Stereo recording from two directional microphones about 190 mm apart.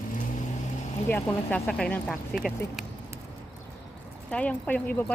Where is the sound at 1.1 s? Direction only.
5° left (ahead or behind).